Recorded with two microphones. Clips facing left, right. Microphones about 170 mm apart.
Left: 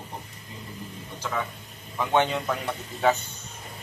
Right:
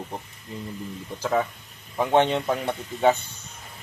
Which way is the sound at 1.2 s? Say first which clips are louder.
Right 7 dB; 35° right (ahead or behind).